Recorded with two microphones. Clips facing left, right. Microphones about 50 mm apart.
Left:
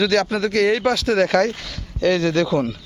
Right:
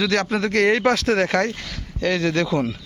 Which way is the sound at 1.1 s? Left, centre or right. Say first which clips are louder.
Left 3 dB; right.